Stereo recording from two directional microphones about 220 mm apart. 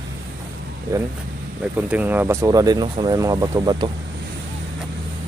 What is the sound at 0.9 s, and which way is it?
Speech, 15° right (ahead or behind).